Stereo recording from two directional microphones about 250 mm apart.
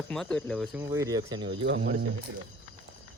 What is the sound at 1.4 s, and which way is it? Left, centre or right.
Speech, right.